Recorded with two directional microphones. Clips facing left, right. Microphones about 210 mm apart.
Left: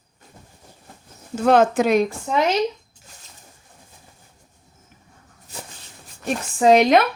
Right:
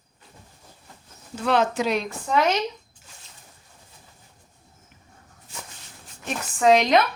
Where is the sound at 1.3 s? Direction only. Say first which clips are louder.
Left 6 dB; 45° left (ahead or behind).